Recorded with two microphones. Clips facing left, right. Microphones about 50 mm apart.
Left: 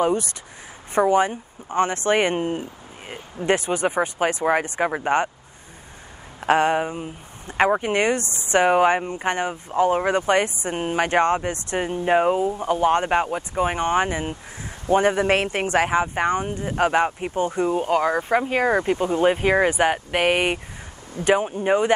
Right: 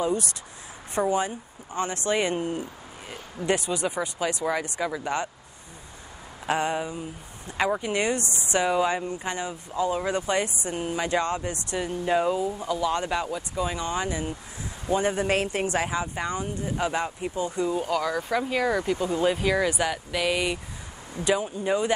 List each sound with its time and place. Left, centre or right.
0.0 s speech: left
6.4 s speech: left